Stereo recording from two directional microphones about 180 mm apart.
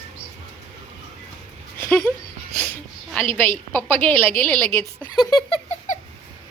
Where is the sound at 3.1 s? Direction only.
10° left (ahead or behind).